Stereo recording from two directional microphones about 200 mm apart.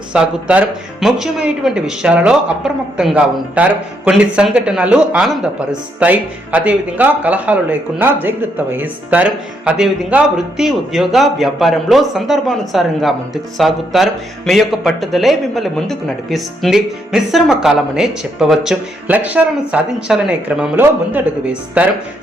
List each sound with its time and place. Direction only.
0.1 s speech: 5° right (ahead or behind)